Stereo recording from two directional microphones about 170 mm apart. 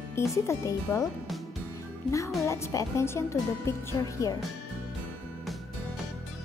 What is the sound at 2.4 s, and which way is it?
Speech, 15° left (ahead or behind).